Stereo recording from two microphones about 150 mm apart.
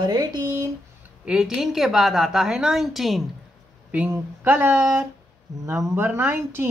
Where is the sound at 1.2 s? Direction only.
5° right (ahead or behind).